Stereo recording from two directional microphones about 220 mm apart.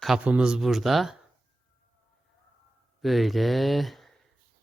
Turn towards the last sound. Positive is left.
turn(degrees=0)  # may be behind; listen again after turning